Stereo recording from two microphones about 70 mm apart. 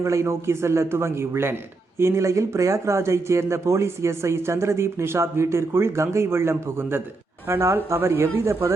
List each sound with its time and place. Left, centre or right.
0.0 s speech: right